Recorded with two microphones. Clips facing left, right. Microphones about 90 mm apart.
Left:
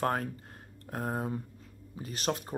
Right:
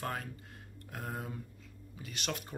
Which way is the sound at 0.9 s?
35° left (ahead or behind).